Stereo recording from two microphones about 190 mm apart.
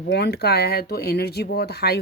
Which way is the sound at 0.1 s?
60° left (ahead or behind).